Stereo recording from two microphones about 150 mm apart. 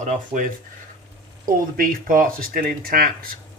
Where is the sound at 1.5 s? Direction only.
70° right (ahead or behind).